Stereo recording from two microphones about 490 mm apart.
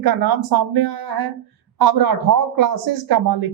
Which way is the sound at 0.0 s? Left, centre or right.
Right.